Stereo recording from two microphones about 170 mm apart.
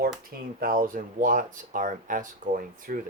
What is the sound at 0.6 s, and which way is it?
Speech, 55° right (ahead or behind).